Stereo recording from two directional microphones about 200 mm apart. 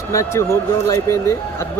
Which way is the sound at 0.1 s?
15° left (ahead or behind).